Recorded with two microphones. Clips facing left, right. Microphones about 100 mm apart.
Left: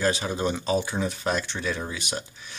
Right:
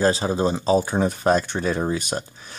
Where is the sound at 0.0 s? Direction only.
30° right (ahead or behind).